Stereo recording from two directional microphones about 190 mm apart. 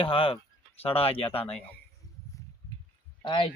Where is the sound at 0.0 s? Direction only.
30° left (ahead or behind).